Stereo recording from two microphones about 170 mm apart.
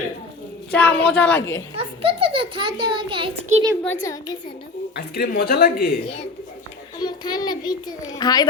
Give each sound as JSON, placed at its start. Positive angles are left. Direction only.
{"t": 0.7, "sound": "a woman's voice", "side_deg": 10}
{"t": 1.7, "sound": "a child's voice", "side_deg": -35}
{"t": 3.8, "sound": "a child's voice", "side_deg": 20}
{"t": 4.9, "sound": "speech", "side_deg": 70}
{"t": 7.0, "sound": "a child's voice", "side_deg": 25}